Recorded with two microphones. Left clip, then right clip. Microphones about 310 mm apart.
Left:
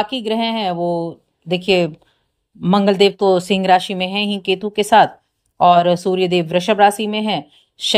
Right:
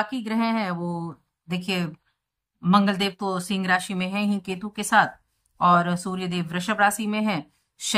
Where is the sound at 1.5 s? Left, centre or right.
Centre.